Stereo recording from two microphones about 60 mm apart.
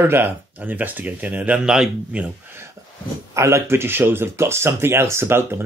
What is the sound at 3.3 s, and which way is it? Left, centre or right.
Speech, right.